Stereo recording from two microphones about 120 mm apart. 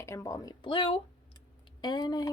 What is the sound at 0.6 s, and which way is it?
A woman's voice, 45° left (ahead or behind).